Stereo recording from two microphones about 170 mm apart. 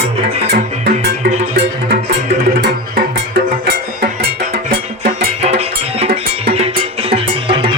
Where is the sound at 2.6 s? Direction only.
75° right (ahead or behind).